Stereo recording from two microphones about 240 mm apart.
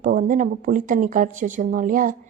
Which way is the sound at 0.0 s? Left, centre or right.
Right.